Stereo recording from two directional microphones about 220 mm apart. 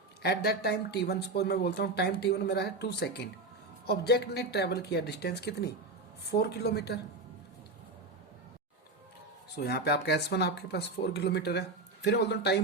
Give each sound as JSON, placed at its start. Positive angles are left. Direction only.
{"t": 0.2, "sound": "speech", "side_deg": 45}
{"t": 9.6, "sound": "speech", "side_deg": 45}